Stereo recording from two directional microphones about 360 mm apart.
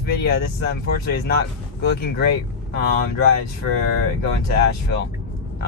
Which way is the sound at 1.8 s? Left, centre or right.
Left.